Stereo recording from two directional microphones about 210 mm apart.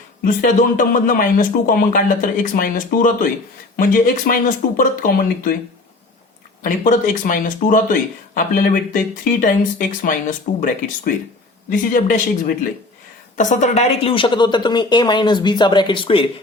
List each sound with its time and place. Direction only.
0.3 s speech: 40° left (ahead or behind)
6.6 s a woman's voice: 40° left (ahead or behind)